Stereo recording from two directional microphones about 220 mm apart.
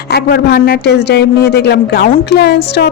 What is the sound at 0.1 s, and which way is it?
Speech, 45° left (ahead or behind).